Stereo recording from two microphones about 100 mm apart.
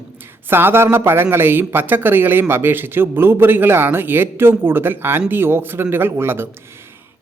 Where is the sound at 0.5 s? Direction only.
20° right (ahead or behind).